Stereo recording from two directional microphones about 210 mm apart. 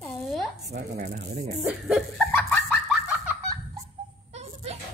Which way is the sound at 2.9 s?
5° right (ahead or behind).